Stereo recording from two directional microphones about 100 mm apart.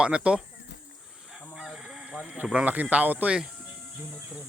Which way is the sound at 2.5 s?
10° right (ahead or behind).